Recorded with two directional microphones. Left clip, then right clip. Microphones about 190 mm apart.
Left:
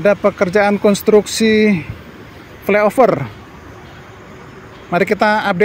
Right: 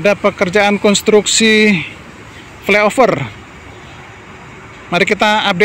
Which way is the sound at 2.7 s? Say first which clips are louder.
Right 1 dB; centre (ahead or behind).